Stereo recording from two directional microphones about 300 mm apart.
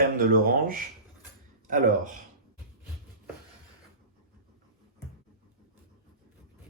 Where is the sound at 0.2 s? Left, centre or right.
Right.